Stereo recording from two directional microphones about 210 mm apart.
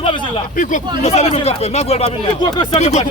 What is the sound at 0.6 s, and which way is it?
Speech, 35° left (ahead or behind).